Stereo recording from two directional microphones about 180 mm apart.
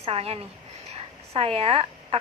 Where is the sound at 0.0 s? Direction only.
35° right (ahead or behind).